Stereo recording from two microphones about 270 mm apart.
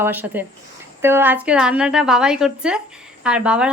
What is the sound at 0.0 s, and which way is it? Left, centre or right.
Speech, centre.